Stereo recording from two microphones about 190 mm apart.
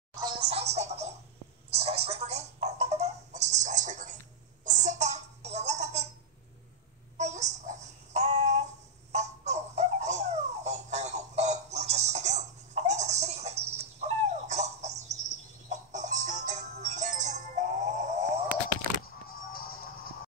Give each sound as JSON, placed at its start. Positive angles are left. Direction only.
{"t": 0.5, "sound": "music", "side_deg": -35}
{"t": 4.6, "sound": "baby laughter", "side_deg": -40}
{"t": 7.2, "sound": "child singing", "side_deg": -40}
{"t": 9.1, "sound": "a sound", "side_deg": -35}
{"t": 15.7, "sound": "music", "side_deg": -40}